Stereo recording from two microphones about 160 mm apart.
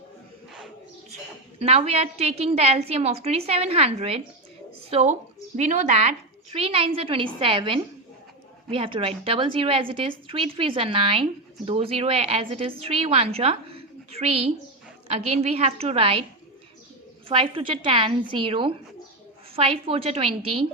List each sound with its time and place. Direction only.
1.5 s a woman's voice: 40° right (ahead or behind)
17.2 s a woman's voice: 35° right (ahead or behind)